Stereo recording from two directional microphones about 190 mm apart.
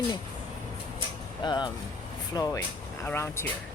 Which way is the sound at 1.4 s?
25° left (ahead or behind).